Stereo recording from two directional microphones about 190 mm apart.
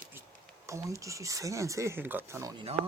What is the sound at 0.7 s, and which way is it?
Speech, 15° right (ahead or behind).